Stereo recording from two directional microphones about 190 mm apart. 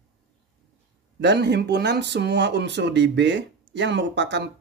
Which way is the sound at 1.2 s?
65° right (ahead or behind).